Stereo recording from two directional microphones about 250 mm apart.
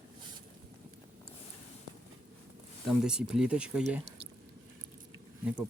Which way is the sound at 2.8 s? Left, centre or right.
Centre.